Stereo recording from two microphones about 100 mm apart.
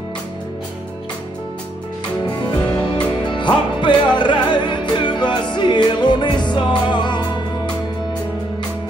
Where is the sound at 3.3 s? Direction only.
50° left (ahead or behind).